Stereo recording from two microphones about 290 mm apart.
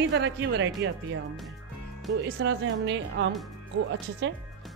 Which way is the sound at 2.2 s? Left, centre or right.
Right.